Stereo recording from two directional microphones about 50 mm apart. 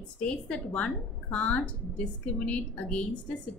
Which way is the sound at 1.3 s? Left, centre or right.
Left.